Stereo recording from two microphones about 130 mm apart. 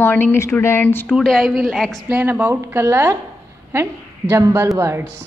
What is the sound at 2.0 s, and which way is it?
A woman's voice, 15° right (ahead or behind).